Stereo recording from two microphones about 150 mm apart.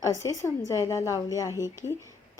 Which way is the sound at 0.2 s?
20° left (ahead or behind).